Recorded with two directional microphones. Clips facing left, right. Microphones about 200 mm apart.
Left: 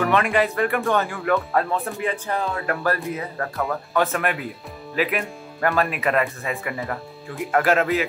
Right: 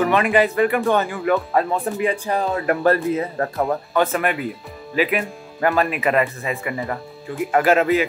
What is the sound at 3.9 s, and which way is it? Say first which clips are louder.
Speech: right 2 dB; centre (ahead or behind).